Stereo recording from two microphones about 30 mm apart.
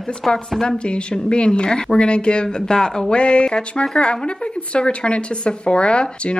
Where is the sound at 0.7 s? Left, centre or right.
Left.